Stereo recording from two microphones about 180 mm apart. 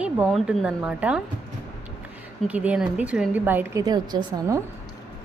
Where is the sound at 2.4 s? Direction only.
5° right (ahead or behind).